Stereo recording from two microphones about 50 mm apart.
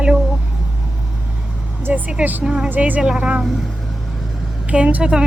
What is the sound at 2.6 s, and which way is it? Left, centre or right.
Speech, right.